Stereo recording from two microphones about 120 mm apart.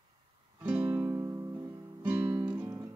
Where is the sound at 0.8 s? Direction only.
25° right (ahead or behind).